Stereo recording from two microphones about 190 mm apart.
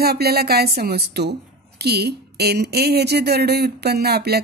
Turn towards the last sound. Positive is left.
turn(degrees=-55)  # may be behind; listen again after turning